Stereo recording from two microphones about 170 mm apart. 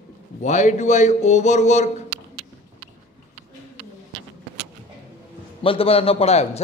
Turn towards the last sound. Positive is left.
turn(degrees=40)  # may be behind; listen again after turning